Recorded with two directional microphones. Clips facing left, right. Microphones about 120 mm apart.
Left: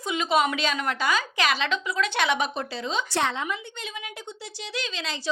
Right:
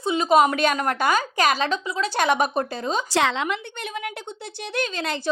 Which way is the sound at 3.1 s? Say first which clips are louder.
Right 6 dB; 90° right.